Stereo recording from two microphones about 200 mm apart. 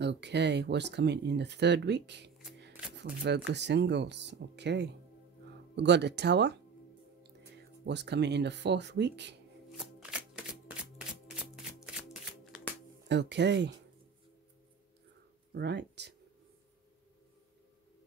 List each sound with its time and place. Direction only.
0.0 s speech: 60° right (ahead or behind)
7.8 s speech: 60° right (ahead or behind)
9.7 s shuffling cards: centre (ahead or behind)
13.1 s speech: 60° right (ahead or behind)
15.5 s speech: 60° right (ahead or behind)